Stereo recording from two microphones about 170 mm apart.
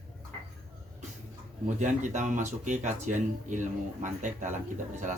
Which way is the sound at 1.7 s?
45° right (ahead or behind).